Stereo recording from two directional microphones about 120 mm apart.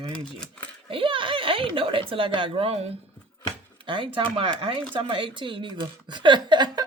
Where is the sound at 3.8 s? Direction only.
45° right (ahead or behind).